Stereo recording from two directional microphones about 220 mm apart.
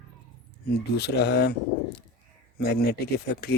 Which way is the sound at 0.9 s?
50° left (ahead or behind).